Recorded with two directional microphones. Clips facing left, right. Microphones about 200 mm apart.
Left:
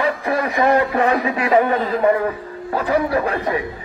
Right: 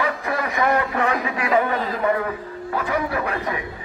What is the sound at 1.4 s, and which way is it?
A man's voice, 35° left (ahead or behind).